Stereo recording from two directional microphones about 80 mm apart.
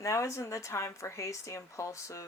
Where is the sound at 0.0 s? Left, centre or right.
Left.